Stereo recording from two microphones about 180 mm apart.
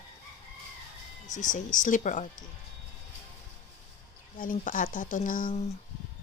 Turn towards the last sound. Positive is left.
turn(degrees=50)  # may be behind; listen again after turning